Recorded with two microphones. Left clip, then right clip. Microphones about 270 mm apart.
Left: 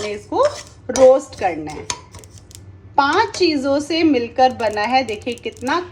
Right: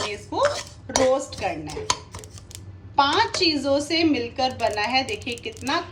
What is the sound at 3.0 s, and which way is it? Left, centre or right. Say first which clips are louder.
A woman's voice: left 4 dB; centre.